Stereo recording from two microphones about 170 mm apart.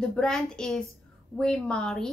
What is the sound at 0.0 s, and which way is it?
A woman's voice, 5° left (ahead or behind).